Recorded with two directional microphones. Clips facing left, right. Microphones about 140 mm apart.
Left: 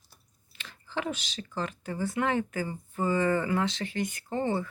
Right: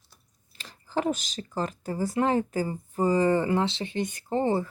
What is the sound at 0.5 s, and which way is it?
Speech, 35° right (ahead or behind).